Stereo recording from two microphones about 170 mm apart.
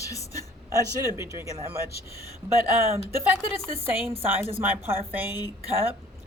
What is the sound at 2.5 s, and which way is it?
Speech, 15° right (ahead or behind).